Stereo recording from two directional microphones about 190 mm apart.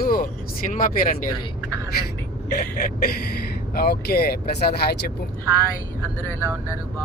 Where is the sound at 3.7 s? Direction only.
55° left (ahead or behind).